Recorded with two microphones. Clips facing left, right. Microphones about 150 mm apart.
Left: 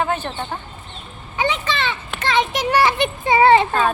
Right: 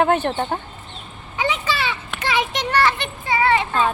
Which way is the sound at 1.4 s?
5° right (ahead or behind).